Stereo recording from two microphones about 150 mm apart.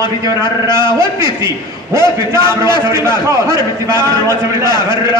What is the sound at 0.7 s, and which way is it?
Speech, 30° left (ahead or behind).